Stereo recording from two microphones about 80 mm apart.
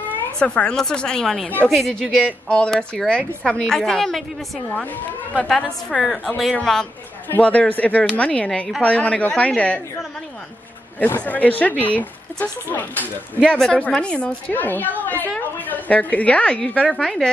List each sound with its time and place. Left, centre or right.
0.4 s a woman's voice: centre
2.2 s a woman's voice: centre
5.6 s a woman's voice: centre
6.0 s speech: centre
7.2 s a woman's voice: centre
11.1 s speech: centre
13.4 s a woman's voice: centre
14.5 s a woman's voice: left; by 17.3 s centre